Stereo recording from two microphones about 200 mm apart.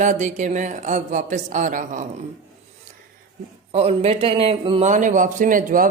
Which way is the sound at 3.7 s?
30° right (ahead or behind).